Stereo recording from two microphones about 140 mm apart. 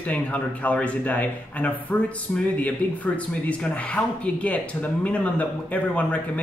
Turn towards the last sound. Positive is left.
turn(degrees=10)  # may be behind; listen again after turning